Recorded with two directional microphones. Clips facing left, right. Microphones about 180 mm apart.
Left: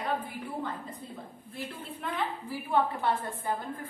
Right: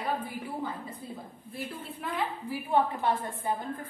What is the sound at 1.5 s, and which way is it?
A woman's voice, 10° right (ahead or behind).